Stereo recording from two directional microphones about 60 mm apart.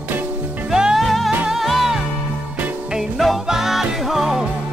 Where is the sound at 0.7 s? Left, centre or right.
Centre.